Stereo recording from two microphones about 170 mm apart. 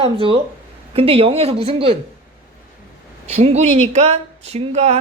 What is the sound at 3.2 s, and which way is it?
Speech, 40° right (ahead or behind).